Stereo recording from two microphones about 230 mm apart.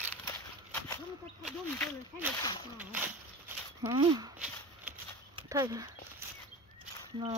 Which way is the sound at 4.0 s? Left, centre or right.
Right.